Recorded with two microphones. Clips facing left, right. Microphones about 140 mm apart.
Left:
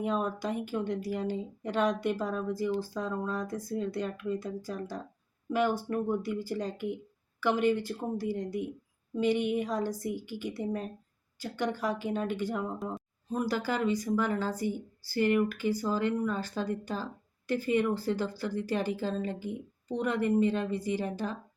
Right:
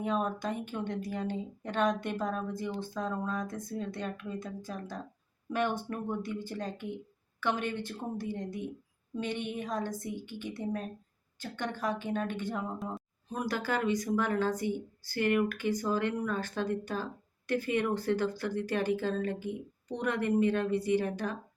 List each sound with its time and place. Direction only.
0.2 s speech: 10° left (ahead or behind)
19.2 s speech: 55° right (ahead or behind)
19.9 s speech: 10° left (ahead or behind)